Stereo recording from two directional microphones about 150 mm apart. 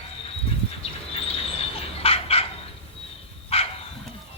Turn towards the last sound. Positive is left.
turn(degrees=40)  # may be behind; listen again after turning